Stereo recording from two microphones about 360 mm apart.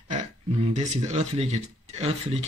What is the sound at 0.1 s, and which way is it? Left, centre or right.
Speech, centre.